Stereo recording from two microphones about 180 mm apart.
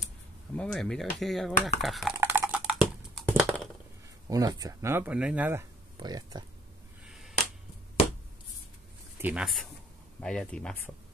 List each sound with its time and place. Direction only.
0.6 s speech: 5° left (ahead or behind)
2.1 s a sound: 15° right (ahead or behind)
2.7 s a sound: centre (ahead or behind)
4.3 s speech: 20° right (ahead or behind)
5.9 s speech: 25° right (ahead or behind)
7.1 s finger snapping: centre (ahead or behind)
9.2 s speech: 5° right (ahead or behind)